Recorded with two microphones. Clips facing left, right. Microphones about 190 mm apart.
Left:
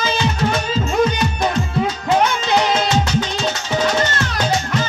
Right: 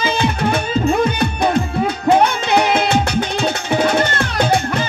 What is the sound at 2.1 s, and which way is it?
Music, 60° right (ahead or behind).